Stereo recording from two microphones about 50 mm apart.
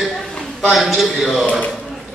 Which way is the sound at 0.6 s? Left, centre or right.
Centre.